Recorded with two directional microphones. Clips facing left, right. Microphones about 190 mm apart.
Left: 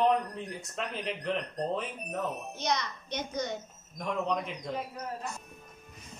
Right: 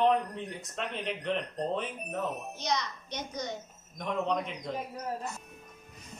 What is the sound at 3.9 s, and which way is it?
Speech, centre (ahead or behind).